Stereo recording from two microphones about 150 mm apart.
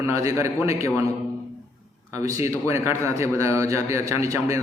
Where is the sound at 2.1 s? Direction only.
20° right (ahead or behind).